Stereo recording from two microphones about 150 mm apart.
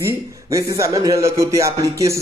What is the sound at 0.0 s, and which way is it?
Speech, 20° right (ahead or behind).